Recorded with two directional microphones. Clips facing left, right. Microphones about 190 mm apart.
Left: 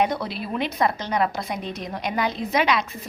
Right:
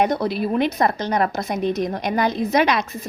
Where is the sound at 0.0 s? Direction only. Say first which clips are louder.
Right 4 dB; 45° right (ahead or behind).